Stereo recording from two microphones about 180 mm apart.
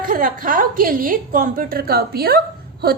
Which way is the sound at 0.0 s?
50° right (ahead or behind).